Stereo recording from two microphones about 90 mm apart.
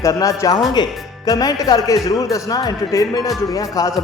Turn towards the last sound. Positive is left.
turn(degrees=40)  # may be behind; listen again after turning